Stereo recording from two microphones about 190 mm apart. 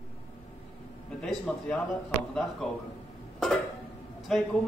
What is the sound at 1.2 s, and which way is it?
Speech, 5° left (ahead or behind).